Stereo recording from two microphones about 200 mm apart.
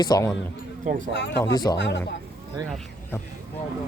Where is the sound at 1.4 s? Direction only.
20° left (ahead or behind).